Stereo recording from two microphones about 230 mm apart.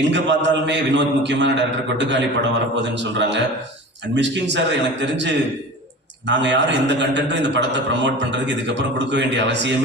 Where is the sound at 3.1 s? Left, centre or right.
Right.